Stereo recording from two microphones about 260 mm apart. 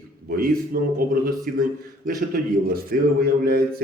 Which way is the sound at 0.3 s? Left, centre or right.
Right.